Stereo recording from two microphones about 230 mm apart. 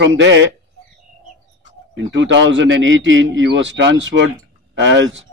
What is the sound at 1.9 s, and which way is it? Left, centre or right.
A man's voice, right.